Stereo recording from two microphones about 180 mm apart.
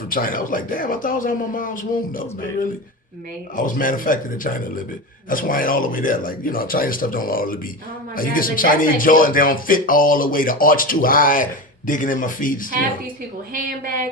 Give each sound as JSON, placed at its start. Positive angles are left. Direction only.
{"t": 0.1, "sound": "speech", "side_deg": 50}
{"t": 13.5, "sound": "a woman's voice", "side_deg": -50}